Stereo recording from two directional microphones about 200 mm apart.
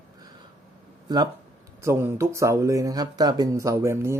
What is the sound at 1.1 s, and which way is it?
Speech, 20° right (ahead or behind).